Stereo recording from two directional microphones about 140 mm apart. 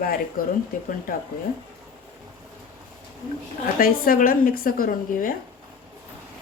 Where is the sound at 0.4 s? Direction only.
90° left.